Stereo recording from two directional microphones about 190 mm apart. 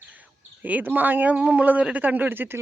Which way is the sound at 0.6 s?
10° right (ahead or behind).